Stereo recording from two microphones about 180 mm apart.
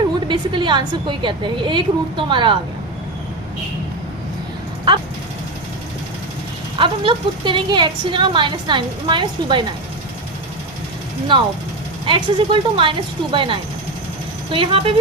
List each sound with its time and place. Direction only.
0.3 s a woman's voice: 25° right (ahead or behind)
6.7 s a woman's voice: 30° right (ahead or behind)
11.3 s a woman's voice: 25° right (ahead or behind)